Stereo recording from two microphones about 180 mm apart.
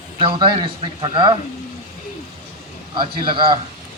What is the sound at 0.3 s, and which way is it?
A man's voice, 25° right (ahead or behind).